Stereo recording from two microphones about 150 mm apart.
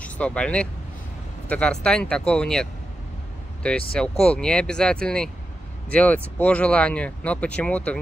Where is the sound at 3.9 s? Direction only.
5° left (ahead or behind).